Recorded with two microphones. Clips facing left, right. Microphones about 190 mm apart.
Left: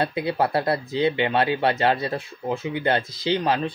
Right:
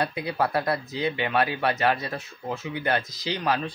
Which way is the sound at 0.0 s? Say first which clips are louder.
Left 3 dB; 25° left (ahead or behind).